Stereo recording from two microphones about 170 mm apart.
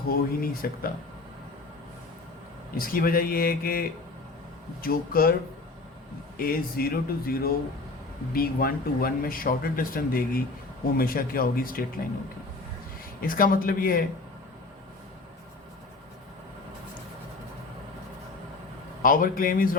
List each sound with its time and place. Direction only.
0.1 s speech: 60° left (ahead or behind)
2.7 s speech: 60° left (ahead or behind)
6.3 s speech: 60° left (ahead or behind)
13.2 s speech: 55° left (ahead or behind)
19.0 s speech: 55° left (ahead or behind)